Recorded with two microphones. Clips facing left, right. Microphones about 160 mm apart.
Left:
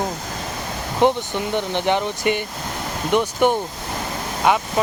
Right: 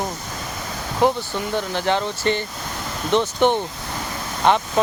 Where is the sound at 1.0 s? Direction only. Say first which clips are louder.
Left 2 dB; 25° left (ahead or behind).